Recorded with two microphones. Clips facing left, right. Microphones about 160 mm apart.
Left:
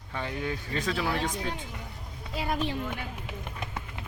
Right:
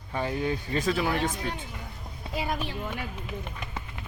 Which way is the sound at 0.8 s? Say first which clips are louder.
Right 3 dB; 5° right (ahead or behind).